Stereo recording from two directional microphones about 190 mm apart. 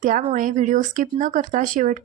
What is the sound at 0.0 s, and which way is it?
Speech, 45° right (ahead or behind).